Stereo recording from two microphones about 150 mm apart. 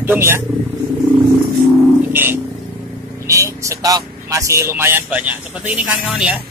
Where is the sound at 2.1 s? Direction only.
15° right (ahead or behind).